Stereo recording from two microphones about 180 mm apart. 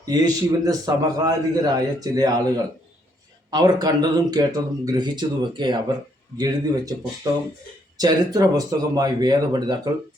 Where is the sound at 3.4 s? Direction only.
20° right (ahead or behind).